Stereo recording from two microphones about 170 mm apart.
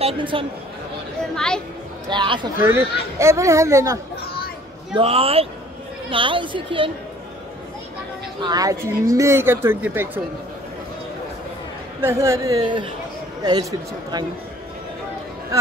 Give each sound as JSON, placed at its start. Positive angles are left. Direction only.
{"t": 0.0, "sound": "a woman's voice", "side_deg": -30}
{"t": 1.3, "sound": "speech", "side_deg": 5}
{"t": 2.0, "sound": "speech", "side_deg": -30}
{"t": 2.6, "sound": "a woman's voice", "side_deg": -15}
{"t": 4.9, "sound": "a woman's voice", "side_deg": -35}
{"t": 8.4, "sound": "a woman's voice", "side_deg": -25}
{"t": 12.0, "sound": "a woman's voice", "side_deg": -15}